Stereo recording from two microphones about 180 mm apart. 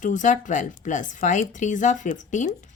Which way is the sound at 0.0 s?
45° left (ahead or behind).